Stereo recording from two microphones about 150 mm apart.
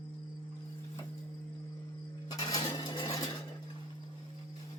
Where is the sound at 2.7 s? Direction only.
30° left (ahead or behind).